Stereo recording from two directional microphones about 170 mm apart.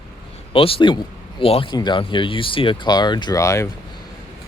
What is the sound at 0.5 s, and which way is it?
Speech, 35° left (ahead or behind).